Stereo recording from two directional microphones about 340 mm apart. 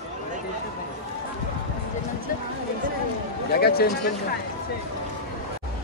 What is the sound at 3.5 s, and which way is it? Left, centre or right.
Speech, left.